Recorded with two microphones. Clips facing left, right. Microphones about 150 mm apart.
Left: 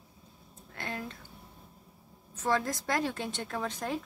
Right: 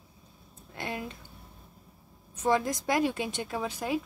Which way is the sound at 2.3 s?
15° right (ahead or behind).